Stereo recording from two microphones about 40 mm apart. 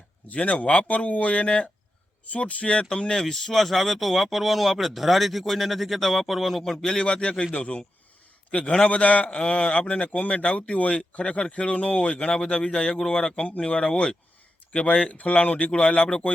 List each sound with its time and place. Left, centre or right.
0.3 s a man's voice: left
3.2 s speech: centre
6.6 s a man's voice: centre
7.0 s a man's voice: left
8.9 s a man's voice: left
15.1 s a man's voice: left